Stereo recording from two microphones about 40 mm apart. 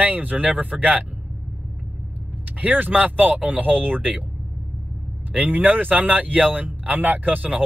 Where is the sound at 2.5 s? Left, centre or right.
Right.